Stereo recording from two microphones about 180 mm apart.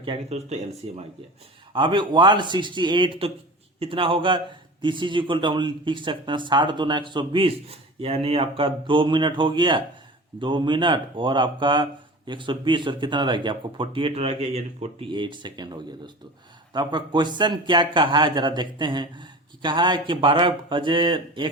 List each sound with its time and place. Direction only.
0.0 s speech: 35° right (ahead or behind)